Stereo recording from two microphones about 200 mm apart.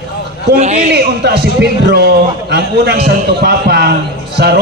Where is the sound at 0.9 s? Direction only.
55° right (ahead or behind).